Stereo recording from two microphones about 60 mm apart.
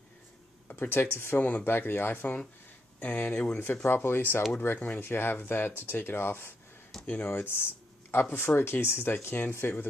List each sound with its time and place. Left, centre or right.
0.7 s speech: left
3.8 s speech: left
4.7 s speech: left
5.0 s speech: left